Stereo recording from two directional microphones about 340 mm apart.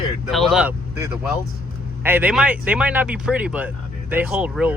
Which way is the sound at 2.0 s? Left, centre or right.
Centre.